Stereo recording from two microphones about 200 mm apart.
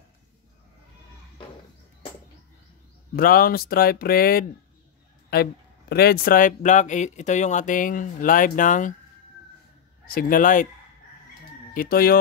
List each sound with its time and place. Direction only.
3.2 s a man's voice: 45° left (ahead or behind)
10.0 s speech: 45° left (ahead or behind)
11.7 s speech: 45° left (ahead or behind)